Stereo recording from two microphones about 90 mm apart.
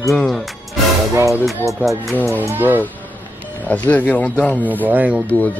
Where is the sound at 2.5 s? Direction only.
20° right (ahead or behind).